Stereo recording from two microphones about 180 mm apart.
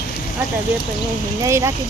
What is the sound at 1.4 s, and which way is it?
Speech, 15° right (ahead or behind).